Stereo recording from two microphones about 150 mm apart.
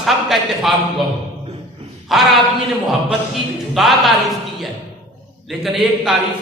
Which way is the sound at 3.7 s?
Centre (ahead or behind).